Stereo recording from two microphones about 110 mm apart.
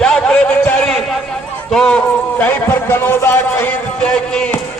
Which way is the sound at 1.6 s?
5° left (ahead or behind).